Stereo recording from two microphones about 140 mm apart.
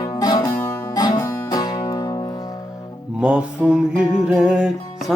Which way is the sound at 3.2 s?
10° right (ahead or behind).